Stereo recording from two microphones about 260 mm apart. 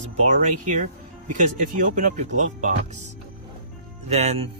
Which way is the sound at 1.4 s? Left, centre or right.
Right.